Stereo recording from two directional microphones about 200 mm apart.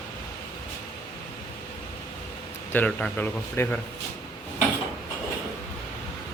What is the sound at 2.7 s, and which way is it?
Speech, 10° left (ahead or behind).